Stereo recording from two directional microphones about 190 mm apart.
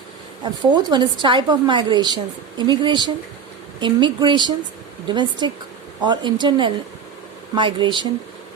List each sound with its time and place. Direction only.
0.4 s a woman's voice: 25° right (ahead or behind)